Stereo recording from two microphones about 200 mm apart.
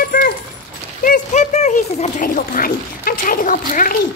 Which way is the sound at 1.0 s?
40° left (ahead or behind).